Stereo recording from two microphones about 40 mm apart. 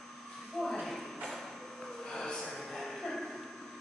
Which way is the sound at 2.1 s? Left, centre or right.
Centre.